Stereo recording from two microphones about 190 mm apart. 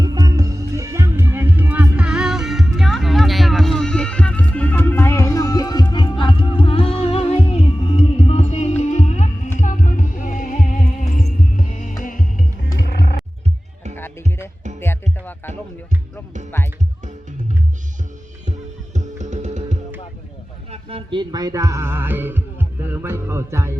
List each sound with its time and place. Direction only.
0.0 s music: 20° right (ahead or behind); by 12.7 s 45° left (ahead or behind)
13.9 s music: 10° left (ahead or behind)
18.9 s music: 40° right (ahead or behind)
20.7 s music: 30° right (ahead or behind)